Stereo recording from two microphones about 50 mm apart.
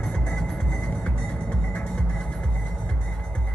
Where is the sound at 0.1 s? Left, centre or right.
Left.